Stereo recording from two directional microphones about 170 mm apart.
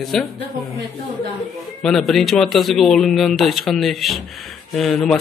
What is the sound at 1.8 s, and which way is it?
Speech, centre (ahead or behind).